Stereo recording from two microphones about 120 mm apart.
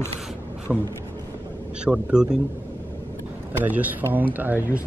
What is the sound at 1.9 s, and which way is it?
Speech, 5° right (ahead or behind).